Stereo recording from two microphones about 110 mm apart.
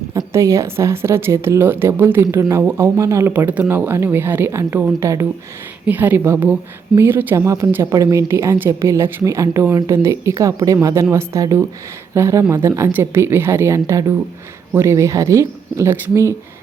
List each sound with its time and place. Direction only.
0.1 s speech: 25° right (ahead or behind)
3.3 s speech: 15° right (ahead or behind)
5.8 s a woman's voice: 15° right (ahead or behind)